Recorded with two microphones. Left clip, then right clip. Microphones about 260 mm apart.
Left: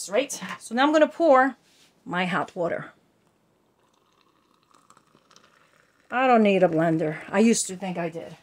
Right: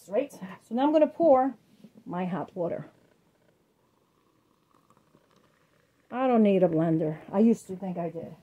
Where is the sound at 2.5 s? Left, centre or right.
Left.